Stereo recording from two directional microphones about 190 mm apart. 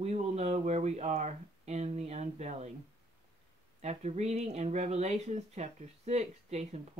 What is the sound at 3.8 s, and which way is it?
Speech, 35° right (ahead or behind).